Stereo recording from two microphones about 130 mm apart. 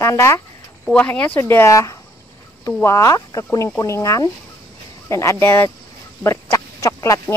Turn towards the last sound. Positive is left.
turn(degrees=25)  # may be behind; listen again after turning